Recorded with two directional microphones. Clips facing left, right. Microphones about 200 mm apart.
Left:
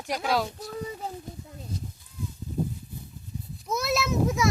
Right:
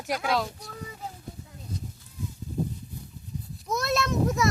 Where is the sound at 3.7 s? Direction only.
Centre (ahead or behind).